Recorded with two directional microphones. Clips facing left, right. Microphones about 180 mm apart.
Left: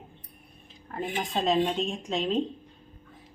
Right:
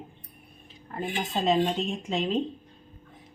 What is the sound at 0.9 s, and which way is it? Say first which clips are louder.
Speech: even; centre (ahead or behind).